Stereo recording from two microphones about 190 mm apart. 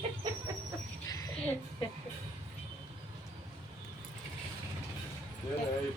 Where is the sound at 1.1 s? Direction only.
20° left (ahead or behind).